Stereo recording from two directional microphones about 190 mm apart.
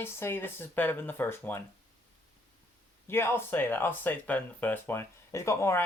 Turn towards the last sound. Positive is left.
turn(degrees=15)  # may be behind; listen again after turning